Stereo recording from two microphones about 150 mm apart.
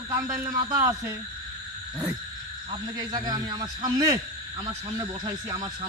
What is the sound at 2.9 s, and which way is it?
Speech, 25° right (ahead or behind).